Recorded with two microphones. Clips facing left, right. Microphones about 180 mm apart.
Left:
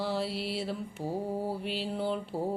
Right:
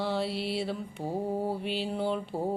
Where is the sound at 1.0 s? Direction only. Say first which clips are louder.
Right 2 dB; 25° right (ahead or behind).